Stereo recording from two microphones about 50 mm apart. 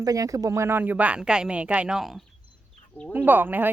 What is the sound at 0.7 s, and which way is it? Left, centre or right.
Speech, right.